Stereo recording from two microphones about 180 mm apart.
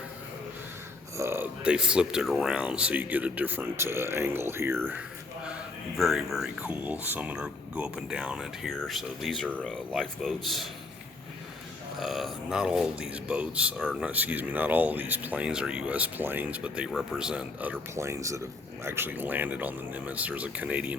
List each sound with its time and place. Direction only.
1.1 s speech: 15° right (ahead or behind)
6.0 s speech: centre (ahead or behind)
11.9 s speech: centre (ahead or behind)